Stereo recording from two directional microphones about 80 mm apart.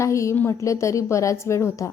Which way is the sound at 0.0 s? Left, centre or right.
Left.